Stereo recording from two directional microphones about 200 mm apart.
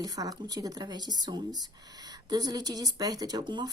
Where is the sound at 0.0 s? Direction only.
20° right (ahead or behind).